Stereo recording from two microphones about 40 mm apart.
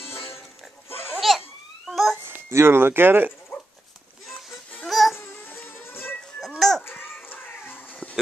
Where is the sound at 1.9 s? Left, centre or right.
Centre.